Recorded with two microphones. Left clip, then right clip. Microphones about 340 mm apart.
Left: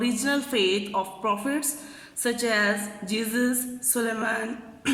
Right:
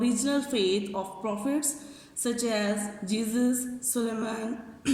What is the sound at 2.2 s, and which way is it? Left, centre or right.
A woman's voice, left.